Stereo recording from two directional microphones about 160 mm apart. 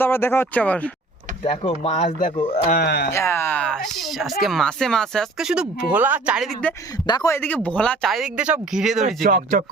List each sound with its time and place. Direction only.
0.0 s speech: 15° left (ahead or behind)
1.5 s speech: 40° left (ahead or behind)
2.7 s speech: 90° left
3.1 s speech: 15° left (ahead or behind); by 6.7 s centre (ahead or behind)
7.1 s a man's voice: 25° left (ahead or behind)
7.3 s speech: 10° left (ahead or behind)
9.0 s speech: 55° right (ahead or behind)